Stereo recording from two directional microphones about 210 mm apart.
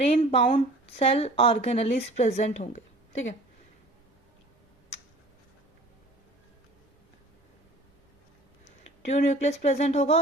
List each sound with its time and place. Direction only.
0.0 s a woman's voice: 30° left (ahead or behind)
9.1 s speech: 35° left (ahead or behind)